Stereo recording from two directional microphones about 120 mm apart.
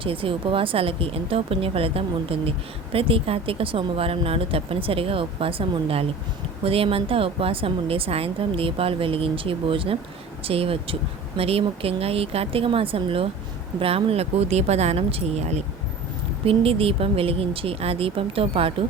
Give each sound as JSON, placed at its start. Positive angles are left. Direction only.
{"t": 0.0, "sound": "speech", "side_deg": -50}
{"t": 16.5, "sound": "speech", "side_deg": -50}